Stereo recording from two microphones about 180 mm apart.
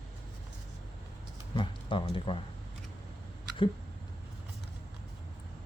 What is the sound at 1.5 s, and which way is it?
Speech, 30° left (ahead or behind).